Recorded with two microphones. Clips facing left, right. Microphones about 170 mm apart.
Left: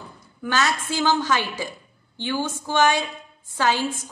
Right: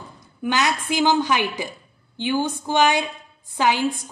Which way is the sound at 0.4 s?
15° right (ahead or behind).